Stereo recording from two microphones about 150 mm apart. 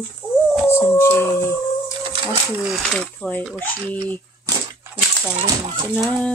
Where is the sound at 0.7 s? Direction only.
15° left (ahead or behind).